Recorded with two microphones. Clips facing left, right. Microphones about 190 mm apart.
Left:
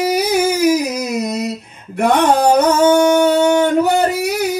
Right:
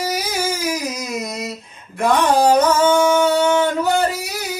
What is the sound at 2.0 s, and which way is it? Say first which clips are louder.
Music: left 2 dB; 65° left (ahead or behind).